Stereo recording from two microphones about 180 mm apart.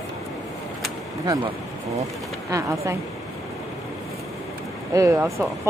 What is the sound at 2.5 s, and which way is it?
Speech, 20° right (ahead or behind).